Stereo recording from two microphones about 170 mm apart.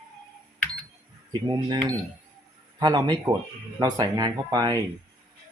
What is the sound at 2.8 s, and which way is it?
Speech, 25° right (ahead or behind).